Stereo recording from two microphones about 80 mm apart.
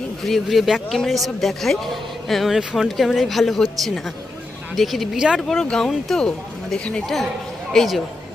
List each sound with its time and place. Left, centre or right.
0.3 s a man's voice: centre